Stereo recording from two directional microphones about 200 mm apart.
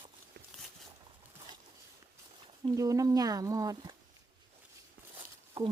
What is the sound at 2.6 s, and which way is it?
Speech, 15° right (ahead or behind).